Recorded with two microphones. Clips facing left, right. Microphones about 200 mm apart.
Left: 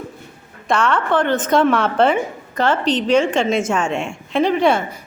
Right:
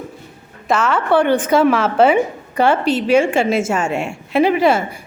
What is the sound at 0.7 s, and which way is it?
A woman's voice, 5° right (ahead or behind).